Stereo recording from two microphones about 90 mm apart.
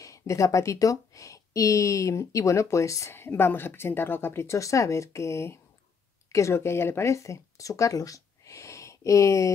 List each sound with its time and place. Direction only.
0.0 s speech: 35° left (ahead or behind)